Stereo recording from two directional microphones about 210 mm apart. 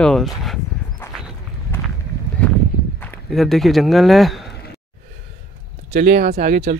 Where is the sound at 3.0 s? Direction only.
5° left (ahead or behind).